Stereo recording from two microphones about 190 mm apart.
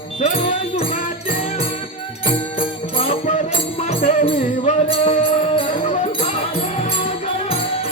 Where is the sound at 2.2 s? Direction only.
30° left (ahead or behind).